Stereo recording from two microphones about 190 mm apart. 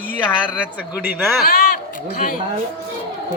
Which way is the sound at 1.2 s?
Centre (ahead or behind).